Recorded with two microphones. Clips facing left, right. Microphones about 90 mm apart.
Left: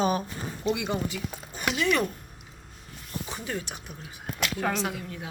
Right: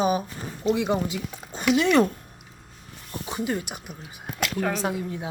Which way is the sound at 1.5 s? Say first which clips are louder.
Right 7 dB; 25° right (ahead or behind).